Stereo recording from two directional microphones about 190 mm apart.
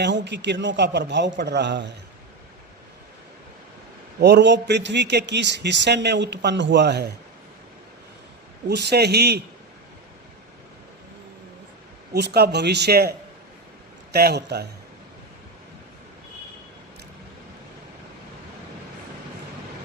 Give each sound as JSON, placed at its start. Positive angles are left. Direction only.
{"t": 0.0, "sound": "a man's voice", "side_deg": -65}
{"t": 4.2, "sound": "a man's voice", "side_deg": -60}
{"t": 8.6, "sound": "a man's voice", "side_deg": -60}
{"t": 12.1, "sound": "a man's voice", "side_deg": -60}